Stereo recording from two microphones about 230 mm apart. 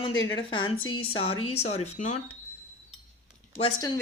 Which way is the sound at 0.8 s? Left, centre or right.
Left.